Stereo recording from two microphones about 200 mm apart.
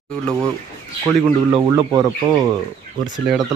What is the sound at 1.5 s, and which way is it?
Speech, 20° right (ahead or behind).